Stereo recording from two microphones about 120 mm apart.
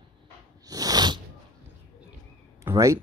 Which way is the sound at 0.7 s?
30° right (ahead or behind).